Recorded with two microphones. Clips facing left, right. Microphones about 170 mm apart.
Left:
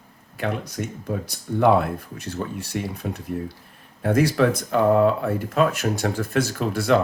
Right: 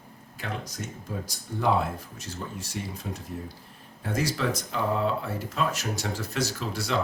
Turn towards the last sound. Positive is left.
turn(degrees=55)  # may be behind; listen again after turning